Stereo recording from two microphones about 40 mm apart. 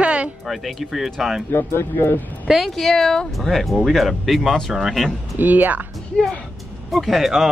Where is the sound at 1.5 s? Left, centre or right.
Left.